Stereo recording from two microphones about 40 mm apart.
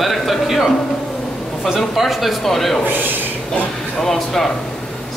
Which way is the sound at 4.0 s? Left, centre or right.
Centre.